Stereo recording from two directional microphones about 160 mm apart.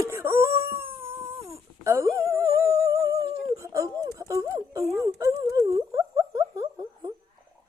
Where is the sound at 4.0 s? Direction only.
20° right (ahead or behind).